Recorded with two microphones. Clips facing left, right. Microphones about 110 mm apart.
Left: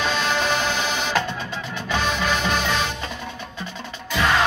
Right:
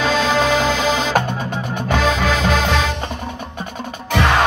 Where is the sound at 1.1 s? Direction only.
50° right (ahead or behind).